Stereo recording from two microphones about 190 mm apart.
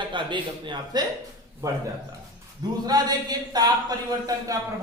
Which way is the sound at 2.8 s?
20° right (ahead or behind).